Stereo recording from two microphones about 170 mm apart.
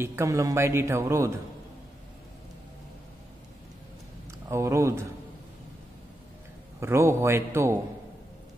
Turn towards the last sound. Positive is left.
turn(degrees=-15)  # may be behind; listen again after turning